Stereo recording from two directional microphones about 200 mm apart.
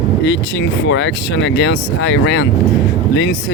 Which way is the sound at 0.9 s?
65° left (ahead or behind).